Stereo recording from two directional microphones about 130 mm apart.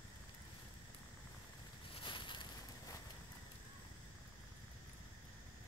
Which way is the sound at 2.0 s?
40° left (ahead or behind).